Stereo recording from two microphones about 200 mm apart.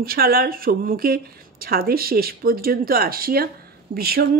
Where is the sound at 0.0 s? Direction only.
50° right (ahead or behind).